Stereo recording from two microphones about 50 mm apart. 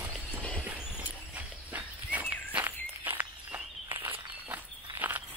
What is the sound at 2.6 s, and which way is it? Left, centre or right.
Walk, right.